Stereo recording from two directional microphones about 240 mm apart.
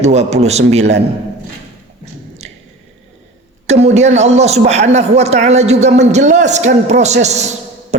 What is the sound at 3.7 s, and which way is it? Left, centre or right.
Speech, right.